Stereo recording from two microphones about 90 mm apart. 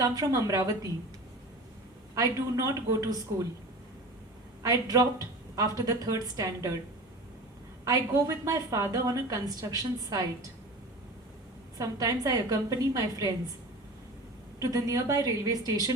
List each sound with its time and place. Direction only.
0.0 s a woman's voice: 40° right (ahead or behind)
2.1 s a woman's voice: 40° right (ahead or behind)
4.6 s a woman's voice: 45° right (ahead or behind)
7.9 s a woman's voice: 40° right (ahead or behind)
11.8 s a woman's voice: 40° right (ahead or behind)
14.6 s a woman's voice: 40° right (ahead or behind)